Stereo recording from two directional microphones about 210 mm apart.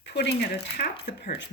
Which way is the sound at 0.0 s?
55° left (ahead or behind).